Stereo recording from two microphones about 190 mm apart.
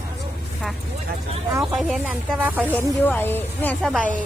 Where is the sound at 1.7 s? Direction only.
Centre (ahead or behind).